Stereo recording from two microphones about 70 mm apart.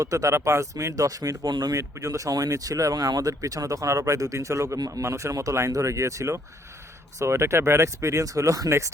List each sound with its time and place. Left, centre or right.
0.0 s speech: right
1.7 s speech: right